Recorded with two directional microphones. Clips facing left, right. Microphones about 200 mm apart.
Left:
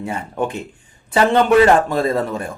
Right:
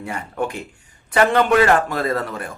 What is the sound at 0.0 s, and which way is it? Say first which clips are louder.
Speech: left 2 dB; 25° left (ahead or behind).